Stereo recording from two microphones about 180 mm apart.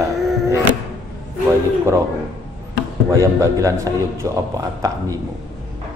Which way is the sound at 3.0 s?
20° right (ahead or behind).